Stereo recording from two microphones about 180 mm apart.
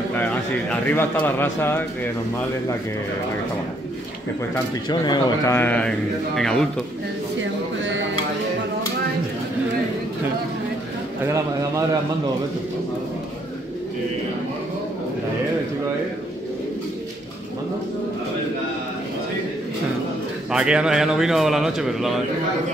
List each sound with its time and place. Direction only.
0.1 s a man's voice: 10° left (ahead or behind)
4.8 s speech: 25° left (ahead or behind)
5.6 s speech: 10° left (ahead or behind)
11.2 s a man's voice: 15° right (ahead or behind)
20.5 s speech: 5° right (ahead or behind)